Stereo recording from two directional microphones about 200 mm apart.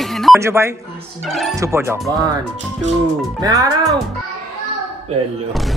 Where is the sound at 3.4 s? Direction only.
15° right (ahead or behind).